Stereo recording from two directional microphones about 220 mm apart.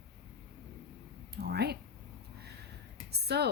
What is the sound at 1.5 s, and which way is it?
Speech, 50° right (ahead or behind).